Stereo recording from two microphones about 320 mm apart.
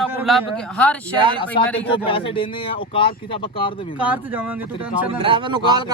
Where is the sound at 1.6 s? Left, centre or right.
Centre.